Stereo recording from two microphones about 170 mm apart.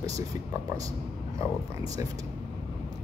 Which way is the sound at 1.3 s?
20° right (ahead or behind).